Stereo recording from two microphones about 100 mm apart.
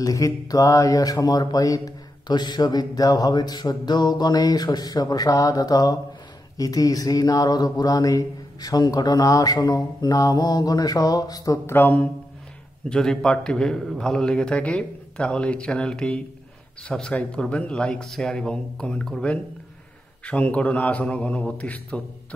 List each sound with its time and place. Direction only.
0.0 s speech: 35° left (ahead or behind); by 12.1 s 20° left (ahead or behind)
12.9 s a man's voice: 5° left (ahead or behind)